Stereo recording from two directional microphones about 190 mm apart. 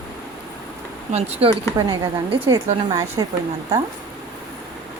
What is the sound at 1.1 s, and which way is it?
A woman's voice, 35° right (ahead or behind).